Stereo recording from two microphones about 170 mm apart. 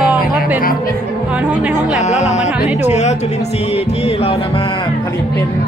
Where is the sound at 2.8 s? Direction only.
40° left (ahead or behind).